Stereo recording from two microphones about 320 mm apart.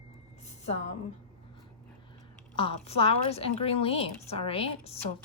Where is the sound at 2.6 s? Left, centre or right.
Centre.